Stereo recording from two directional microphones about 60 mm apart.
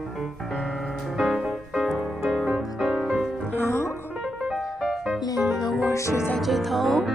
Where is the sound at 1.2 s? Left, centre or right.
Centre.